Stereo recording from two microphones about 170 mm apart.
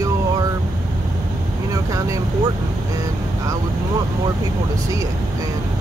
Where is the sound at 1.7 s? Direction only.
20° right (ahead or behind).